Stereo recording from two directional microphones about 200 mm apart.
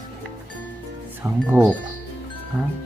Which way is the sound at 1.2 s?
10° right (ahead or behind).